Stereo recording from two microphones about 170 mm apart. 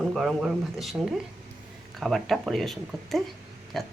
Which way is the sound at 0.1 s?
Centre (ahead or behind).